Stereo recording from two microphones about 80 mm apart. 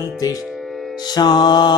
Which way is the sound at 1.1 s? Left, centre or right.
Left.